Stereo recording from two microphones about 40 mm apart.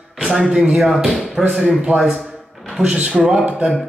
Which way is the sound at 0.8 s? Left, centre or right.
Centre.